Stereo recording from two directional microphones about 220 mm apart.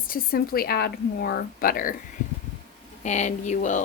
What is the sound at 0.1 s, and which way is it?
A woman's voice, 40° left (ahead or behind).